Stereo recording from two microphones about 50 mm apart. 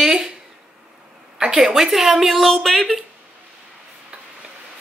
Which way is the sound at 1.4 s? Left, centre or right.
Centre.